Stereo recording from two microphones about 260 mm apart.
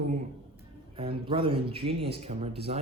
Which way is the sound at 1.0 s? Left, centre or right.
Right.